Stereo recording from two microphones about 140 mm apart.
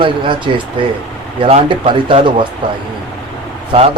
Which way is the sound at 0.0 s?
35° right (ahead or behind).